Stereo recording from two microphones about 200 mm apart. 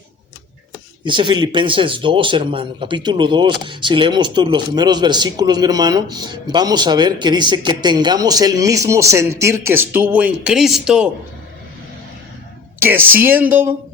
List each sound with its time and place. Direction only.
1.0 s a man's voice: 25° right (ahead or behind); by 11.1 s 5° right (ahead or behind)
12.8 s a man's voice: 10° right (ahead or behind)